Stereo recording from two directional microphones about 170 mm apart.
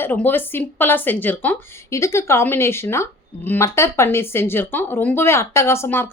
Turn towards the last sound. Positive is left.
turn(degrees=15)  # may be behind; listen again after turning